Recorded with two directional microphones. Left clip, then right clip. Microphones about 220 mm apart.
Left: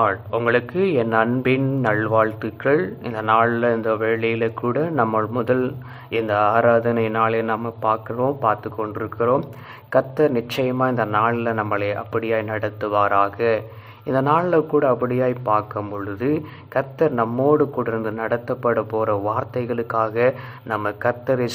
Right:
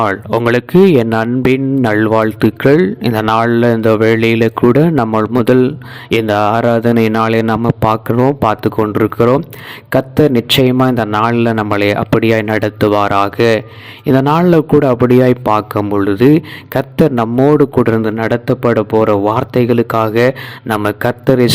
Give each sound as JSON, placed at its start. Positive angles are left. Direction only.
{"t": 0.0, "sound": "speech", "side_deg": -50}
{"t": 7.6, "sound": "speech", "side_deg": -40}